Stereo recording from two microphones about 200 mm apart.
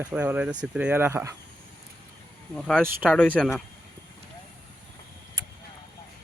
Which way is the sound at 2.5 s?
5° left (ahead or behind).